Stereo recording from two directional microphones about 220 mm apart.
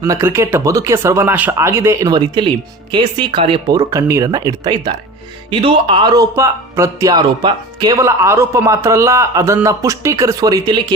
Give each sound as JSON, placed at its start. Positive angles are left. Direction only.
{"t": 0.0, "sound": "speech", "side_deg": -10}